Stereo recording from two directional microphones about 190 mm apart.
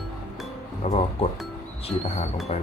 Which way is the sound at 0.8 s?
30° left (ahead or behind).